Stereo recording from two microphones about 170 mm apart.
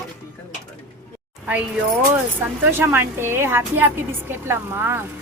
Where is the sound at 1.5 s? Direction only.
10° right (ahead or behind).